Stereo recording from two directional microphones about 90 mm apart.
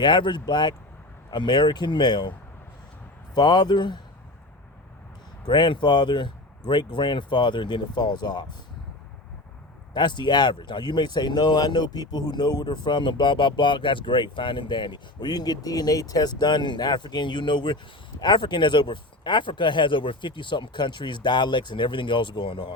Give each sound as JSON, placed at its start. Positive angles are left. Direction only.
{"t": 0.0, "sound": "speech", "side_deg": 55}
{"t": 3.3, "sound": "speech", "side_deg": 50}
{"t": 5.5, "sound": "speech", "side_deg": 60}
{"t": 9.9, "sound": "speech", "side_deg": 55}